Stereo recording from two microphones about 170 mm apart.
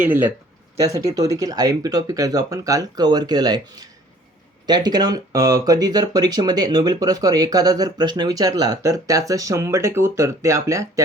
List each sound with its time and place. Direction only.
0.0 s speech: 10° right (ahead or behind)